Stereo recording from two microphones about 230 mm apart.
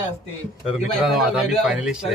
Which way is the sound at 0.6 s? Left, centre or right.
Centre.